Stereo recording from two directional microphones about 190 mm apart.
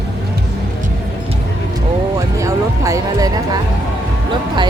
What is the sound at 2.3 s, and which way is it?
Speech, 15° right (ahead or behind).